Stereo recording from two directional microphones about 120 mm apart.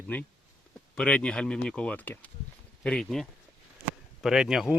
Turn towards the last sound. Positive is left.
turn(degrees=-5)  # may be behind; listen again after turning